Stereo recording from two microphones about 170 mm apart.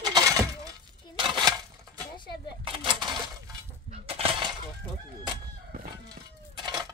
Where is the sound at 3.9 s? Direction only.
35° right (ahead or behind).